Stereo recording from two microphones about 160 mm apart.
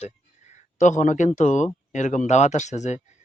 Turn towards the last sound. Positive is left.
turn(degrees=45)  # may be behind; listen again after turning